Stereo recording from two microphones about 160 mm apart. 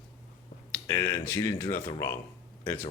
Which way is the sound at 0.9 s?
20° left (ahead or behind).